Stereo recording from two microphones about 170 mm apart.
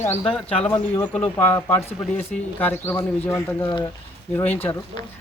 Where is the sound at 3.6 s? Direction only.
25° left (ahead or behind).